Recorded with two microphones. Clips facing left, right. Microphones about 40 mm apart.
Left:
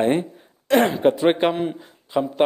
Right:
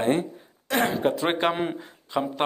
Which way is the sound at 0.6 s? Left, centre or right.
Left.